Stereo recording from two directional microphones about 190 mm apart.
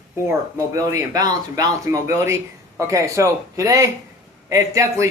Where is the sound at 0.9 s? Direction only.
20° right (ahead or behind).